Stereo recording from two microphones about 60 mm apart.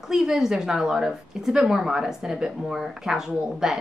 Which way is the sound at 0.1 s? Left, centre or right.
Centre.